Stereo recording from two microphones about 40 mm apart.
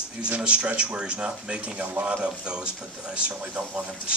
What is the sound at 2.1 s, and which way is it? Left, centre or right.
Speech, right.